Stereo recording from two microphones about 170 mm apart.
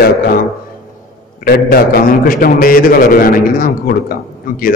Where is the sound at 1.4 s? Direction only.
60° left (ahead or behind).